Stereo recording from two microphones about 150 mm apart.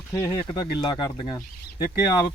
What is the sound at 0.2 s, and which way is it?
Speech, 20° left (ahead or behind).